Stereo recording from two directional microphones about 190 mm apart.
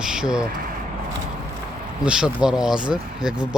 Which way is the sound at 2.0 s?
5° right (ahead or behind).